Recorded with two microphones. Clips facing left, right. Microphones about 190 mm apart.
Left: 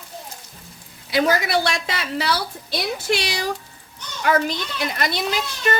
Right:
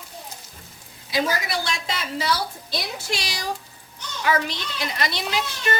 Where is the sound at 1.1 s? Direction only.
65° left (ahead or behind).